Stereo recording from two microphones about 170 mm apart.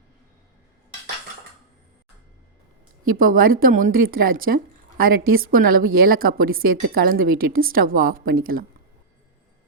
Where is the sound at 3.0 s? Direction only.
55° right (ahead or behind).